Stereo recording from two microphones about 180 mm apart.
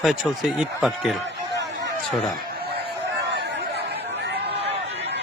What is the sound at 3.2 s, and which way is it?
Chatter, 70° right (ahead or behind).